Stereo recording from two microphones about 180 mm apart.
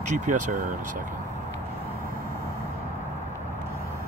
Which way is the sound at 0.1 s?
45° right (ahead or behind).